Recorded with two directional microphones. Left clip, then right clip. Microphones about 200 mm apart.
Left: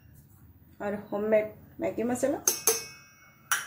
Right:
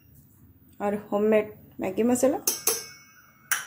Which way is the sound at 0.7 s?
30° right (ahead or behind).